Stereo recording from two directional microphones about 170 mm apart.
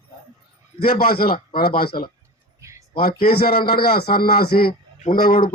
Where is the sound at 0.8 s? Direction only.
60° left (ahead or behind).